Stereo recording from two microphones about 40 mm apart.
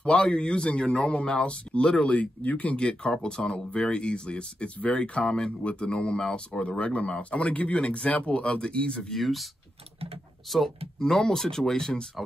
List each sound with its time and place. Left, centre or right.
0.0 s speech: left
1.9 s speech: centre
2.1 s speech: left
9.1 s speech: centre
11.0 s speech: centre